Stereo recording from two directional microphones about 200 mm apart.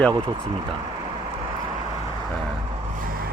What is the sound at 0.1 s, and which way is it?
Speech, 20° right (ahead or behind).